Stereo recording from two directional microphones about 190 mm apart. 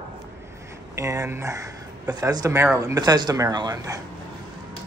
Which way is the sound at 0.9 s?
15° right (ahead or behind).